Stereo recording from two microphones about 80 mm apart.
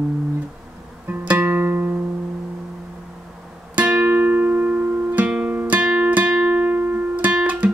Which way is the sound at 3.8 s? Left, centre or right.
Centre.